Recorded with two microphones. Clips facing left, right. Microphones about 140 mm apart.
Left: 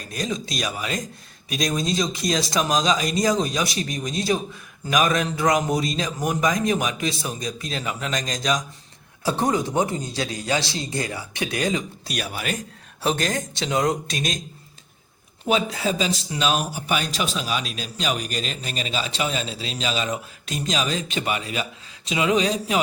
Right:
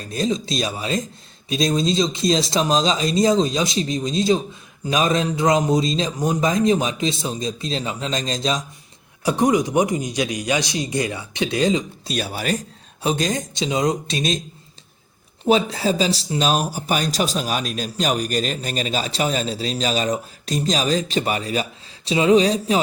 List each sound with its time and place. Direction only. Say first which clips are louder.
0.1 s speech: right 6 dB; 25° right (ahead or behind)
9.2 s speech: right 4 dB; 15° right (ahead or behind); by 12.5 s 35° right (ahead or behind)
13.0 s speech: right 2 dB; 15° right (ahead or behind)
15.4 s speech: right 4 dB; 35° right (ahead or behind)